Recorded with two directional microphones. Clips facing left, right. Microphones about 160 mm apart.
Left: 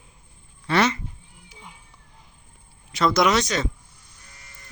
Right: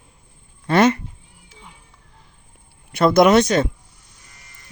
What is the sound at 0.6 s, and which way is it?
Speech, 50° right (ahead or behind).